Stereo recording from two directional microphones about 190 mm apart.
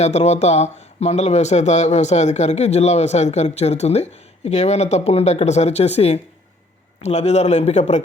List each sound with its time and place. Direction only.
0.0 s speech: 35° left (ahead or behind)